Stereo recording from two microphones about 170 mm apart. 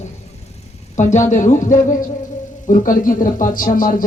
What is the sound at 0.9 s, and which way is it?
Speech, 45° left (ahead or behind).